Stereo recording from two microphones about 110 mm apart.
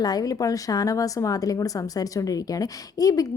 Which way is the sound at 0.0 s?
35° left (ahead or behind).